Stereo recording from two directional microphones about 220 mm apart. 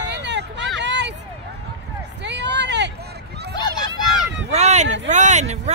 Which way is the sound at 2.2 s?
50° right (ahead or behind).